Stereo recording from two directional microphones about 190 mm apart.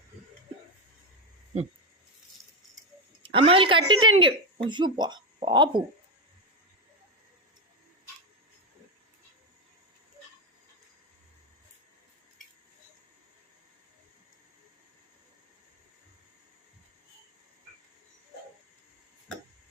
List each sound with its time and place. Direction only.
3.2 s speech: 30° right (ahead or behind)